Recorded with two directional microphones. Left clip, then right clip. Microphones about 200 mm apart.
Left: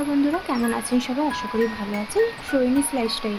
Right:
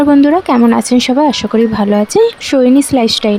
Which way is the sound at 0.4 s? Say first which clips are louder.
Right 14 dB; 55° right (ahead or behind).